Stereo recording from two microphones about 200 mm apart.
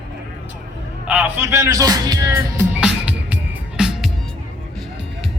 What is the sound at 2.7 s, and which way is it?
Music, 5° right (ahead or behind).